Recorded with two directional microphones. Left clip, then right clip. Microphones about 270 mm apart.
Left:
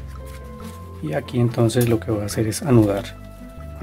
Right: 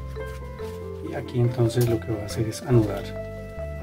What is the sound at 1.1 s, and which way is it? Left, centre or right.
Speech, left.